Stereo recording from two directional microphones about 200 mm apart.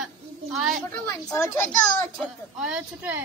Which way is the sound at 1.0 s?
10° left (ahead or behind).